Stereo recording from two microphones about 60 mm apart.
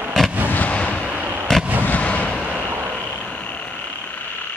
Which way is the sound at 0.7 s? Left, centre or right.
Centre.